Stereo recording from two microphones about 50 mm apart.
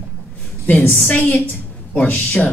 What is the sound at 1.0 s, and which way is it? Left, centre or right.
A woman's voice, left.